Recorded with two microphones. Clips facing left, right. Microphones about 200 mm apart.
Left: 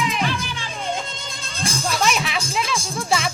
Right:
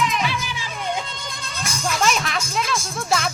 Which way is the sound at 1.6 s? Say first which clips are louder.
Left 2 dB; 30° left (ahead or behind).